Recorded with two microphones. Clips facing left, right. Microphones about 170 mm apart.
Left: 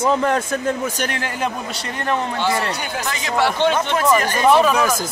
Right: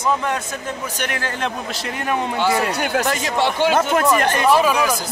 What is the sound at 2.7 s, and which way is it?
Speech, 60° right (ahead or behind).